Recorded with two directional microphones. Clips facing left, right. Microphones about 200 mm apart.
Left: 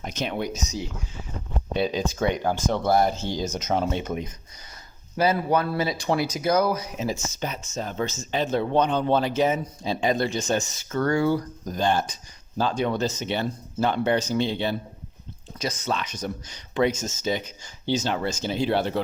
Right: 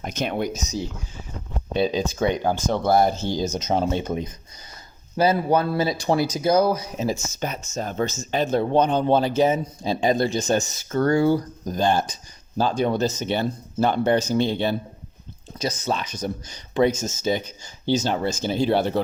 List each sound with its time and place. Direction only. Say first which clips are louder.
0.0 s speech: right 3 dB; 50° right (ahead or behind)
1.8 s speech: right 3 dB; 25° right (ahead or behind)
2.7 s speech: right 3 dB; 40° right (ahead or behind)
15.5 s speech: right 2 dB; 35° right (ahead or behind)